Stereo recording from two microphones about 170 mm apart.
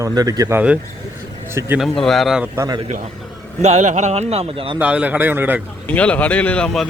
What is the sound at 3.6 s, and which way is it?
Speech, 45° right (ahead or behind).